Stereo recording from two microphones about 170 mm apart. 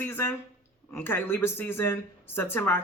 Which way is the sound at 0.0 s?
10° left (ahead or behind).